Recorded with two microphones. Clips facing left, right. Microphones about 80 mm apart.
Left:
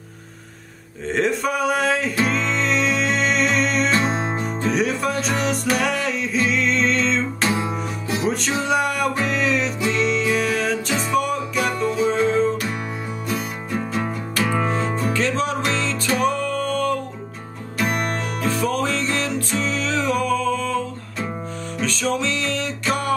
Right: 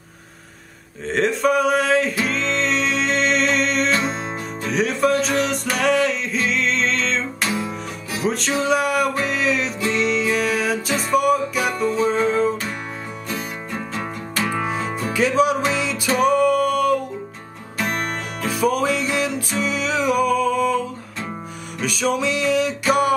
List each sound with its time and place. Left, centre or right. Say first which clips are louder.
1.0 s a sound: right 2 dB; centre
2.2 s music: even; centre
3.9 s music: left 1 dB; left
4.6 s music: right 3 dB; centre
7.4 s music: left 2 dB; left
8.2 s music: right 3 dB; centre
9.2 s a sound: even; centre
9.8 s music: right 1 dB; centre
14.6 s music: left 2 dB; centre
17.7 s music: left 1 dB; centre
18.5 s music: right 4 dB; centre